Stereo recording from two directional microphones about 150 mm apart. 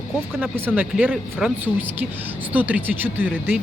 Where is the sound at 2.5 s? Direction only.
10° right (ahead or behind).